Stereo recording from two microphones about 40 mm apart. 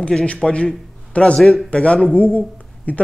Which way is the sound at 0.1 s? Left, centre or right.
Left.